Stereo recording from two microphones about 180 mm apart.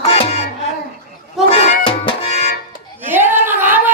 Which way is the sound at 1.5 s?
30° left (ahead or behind).